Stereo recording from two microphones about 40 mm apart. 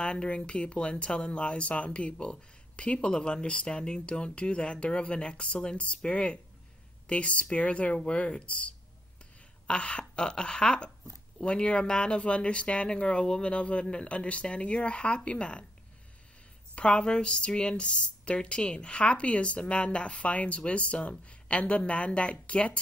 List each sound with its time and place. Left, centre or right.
0.0 s speech: left
9.7 s speech: left
16.7 s speech: left